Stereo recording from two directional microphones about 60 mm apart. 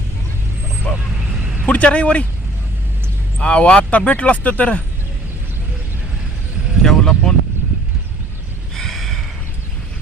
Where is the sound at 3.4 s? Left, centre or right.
Centre.